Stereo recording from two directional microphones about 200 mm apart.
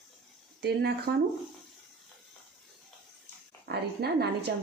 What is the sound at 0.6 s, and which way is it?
Speech, 55° right (ahead or behind).